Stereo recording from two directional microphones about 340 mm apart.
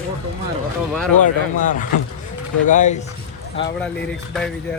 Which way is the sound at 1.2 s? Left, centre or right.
Left.